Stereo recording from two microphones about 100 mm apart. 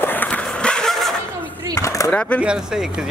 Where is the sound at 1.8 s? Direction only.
30° left (ahead or behind).